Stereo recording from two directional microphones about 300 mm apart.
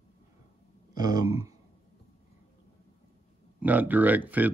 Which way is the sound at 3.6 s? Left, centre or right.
Centre.